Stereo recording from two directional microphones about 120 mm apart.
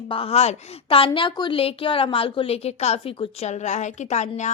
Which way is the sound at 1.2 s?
40° left (ahead or behind).